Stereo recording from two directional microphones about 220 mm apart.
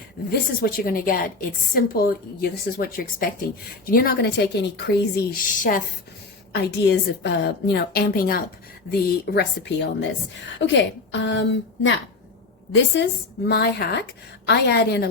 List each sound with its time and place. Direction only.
0.6 s a woman's voice: 40° left (ahead or behind)